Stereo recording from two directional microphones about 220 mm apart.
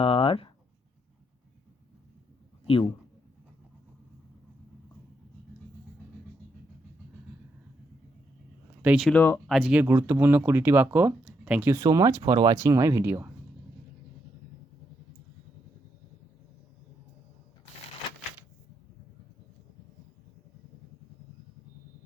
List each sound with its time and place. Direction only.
0.0 s a sound: 25° left (ahead or behind)
2.6 s speech: 25° left (ahead or behind)
8.8 s speech: 5° right (ahead or behind)
9.0 s speech: 10° left (ahead or behind); by 13.3 s 10° right (ahead or behind)